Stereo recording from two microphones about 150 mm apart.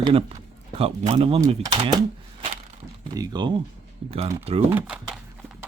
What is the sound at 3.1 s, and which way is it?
Speech, 25° right (ahead or behind).